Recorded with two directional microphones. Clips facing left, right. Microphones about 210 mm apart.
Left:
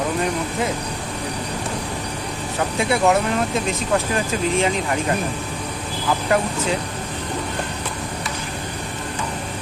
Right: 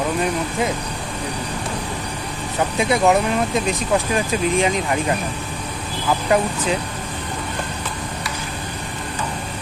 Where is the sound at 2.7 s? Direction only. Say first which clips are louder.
Right 1 dB; 15° right (ahead or behind).